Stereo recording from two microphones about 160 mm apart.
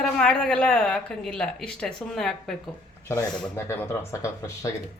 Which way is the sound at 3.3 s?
15° left (ahead or behind).